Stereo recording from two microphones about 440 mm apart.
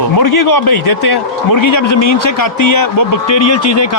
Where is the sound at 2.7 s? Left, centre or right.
Left.